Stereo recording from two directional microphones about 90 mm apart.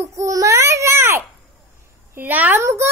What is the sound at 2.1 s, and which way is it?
Speech, 20° right (ahead or behind).